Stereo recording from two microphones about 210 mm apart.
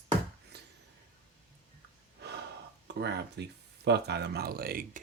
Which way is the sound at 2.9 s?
55° right (ahead or behind).